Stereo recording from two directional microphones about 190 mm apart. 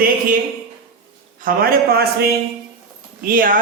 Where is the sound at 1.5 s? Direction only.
55° right (ahead or behind).